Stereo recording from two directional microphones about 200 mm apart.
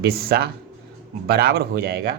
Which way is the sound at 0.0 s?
50° right (ahead or behind).